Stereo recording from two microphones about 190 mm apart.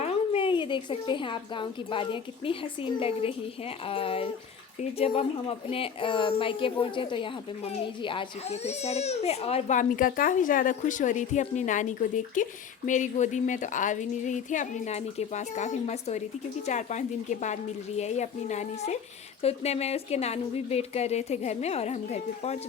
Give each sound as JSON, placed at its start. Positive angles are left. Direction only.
{"t": 0.0, "sound": "a woman's voice", "side_deg": 30}